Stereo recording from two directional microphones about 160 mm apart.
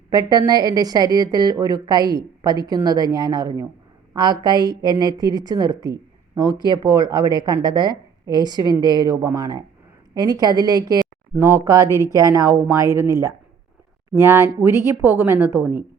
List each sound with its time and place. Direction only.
0.1 s a woman's voice: 25° right (ahead or behind)